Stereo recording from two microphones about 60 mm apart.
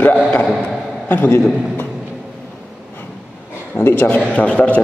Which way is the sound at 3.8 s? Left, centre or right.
Left.